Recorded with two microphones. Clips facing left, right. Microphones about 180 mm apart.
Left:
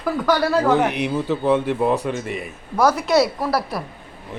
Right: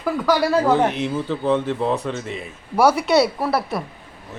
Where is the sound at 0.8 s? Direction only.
15° left (ahead or behind).